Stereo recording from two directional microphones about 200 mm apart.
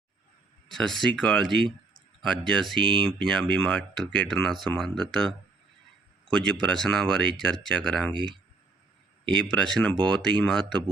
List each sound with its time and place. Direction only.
0.7 s speech: centre (ahead or behind)
6.3 s speech: 5° left (ahead or behind)
9.2 s speech: centre (ahead or behind)